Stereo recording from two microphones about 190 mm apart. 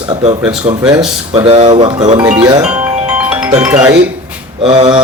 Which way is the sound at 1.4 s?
25° right (ahead or behind).